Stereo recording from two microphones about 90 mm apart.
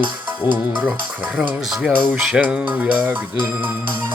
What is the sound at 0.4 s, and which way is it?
Speech, 60° left (ahead or behind).